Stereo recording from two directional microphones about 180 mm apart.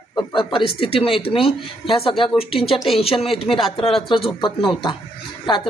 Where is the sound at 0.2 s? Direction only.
30° left (ahead or behind).